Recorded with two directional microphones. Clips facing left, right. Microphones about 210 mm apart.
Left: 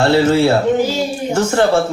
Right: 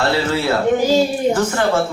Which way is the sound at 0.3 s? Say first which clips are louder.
Left 4 dB; 25° left (ahead or behind).